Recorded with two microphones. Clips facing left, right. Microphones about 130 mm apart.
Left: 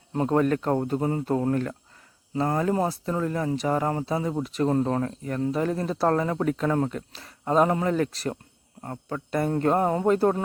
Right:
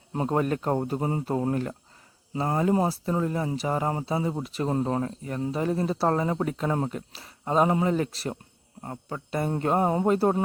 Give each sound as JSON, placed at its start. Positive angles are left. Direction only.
{"t": 0.1, "sound": "speech", "side_deg": -10}
{"t": 3.5, "sound": "speech", "side_deg": 0}
{"t": 3.8, "sound": "speech", "side_deg": -15}
{"t": 7.1, "sound": "speech", "side_deg": -5}